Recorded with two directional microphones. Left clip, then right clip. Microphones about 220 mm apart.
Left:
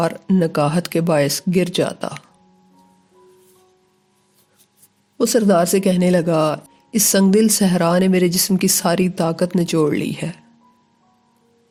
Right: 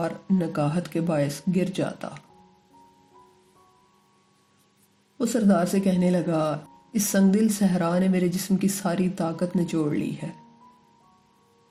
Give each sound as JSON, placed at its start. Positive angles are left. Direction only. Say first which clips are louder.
{"t": 0.0, "sound": "speech", "louder": "left 9 dB", "side_deg": 40}
{"t": 5.1, "sound": "speech", "louder": "left 9 dB", "side_deg": 40}